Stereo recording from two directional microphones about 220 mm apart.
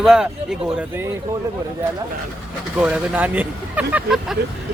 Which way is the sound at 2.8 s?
5° right (ahead or behind).